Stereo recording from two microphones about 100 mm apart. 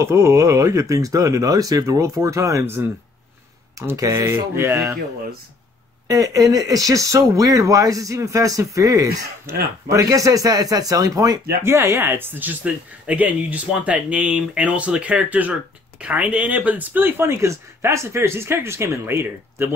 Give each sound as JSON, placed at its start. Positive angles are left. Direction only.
{"t": 0.0, "sound": "speech", "side_deg": -30}
{"t": 3.9, "sound": "speech", "side_deg": -35}
{"t": 6.0, "sound": "speech", "side_deg": -35}
{"t": 11.6, "sound": "speech", "side_deg": -25}